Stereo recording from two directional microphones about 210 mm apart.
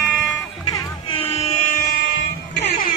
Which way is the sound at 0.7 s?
20° left (ahead or behind).